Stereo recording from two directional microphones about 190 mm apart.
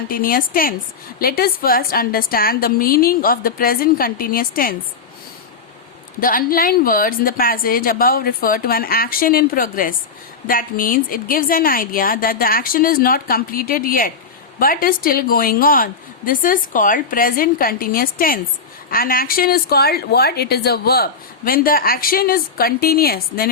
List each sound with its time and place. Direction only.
0.1 s a woman's voice: 50° left (ahead or behind)
6.1 s a woman's voice: 50° left (ahead or behind)